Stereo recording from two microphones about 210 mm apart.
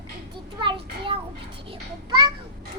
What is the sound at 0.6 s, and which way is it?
A child's voice, 20° right (ahead or behind).